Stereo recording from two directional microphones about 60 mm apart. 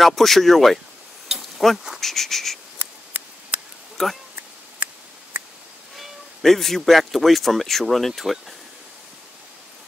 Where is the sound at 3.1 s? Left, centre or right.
Right.